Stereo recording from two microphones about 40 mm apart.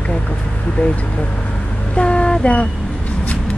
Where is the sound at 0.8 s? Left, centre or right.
Left.